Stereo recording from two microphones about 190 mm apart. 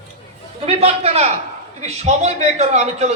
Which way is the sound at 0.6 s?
30° right (ahead or behind).